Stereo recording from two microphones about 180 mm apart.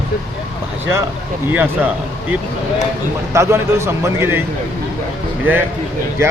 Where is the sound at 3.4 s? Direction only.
15° right (ahead or behind).